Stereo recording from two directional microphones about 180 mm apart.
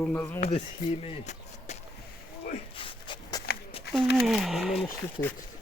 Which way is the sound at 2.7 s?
30° left (ahead or behind).